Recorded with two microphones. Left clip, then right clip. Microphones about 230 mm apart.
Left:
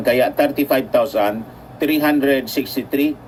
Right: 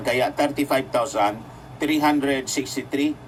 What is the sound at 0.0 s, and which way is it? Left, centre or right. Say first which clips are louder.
Speech: left 6 dB; centre.